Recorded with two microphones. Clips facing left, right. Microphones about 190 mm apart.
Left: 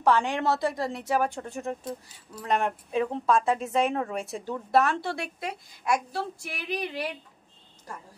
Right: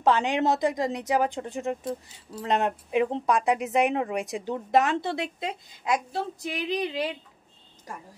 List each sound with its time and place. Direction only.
0.0 s a woman's voice: 20° right (ahead or behind)